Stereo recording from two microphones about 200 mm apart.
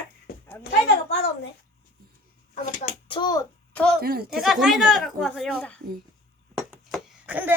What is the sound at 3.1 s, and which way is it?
Speech, 20° left (ahead or behind).